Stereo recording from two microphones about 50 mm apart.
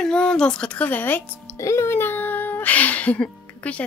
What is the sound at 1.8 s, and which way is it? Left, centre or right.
Music, left.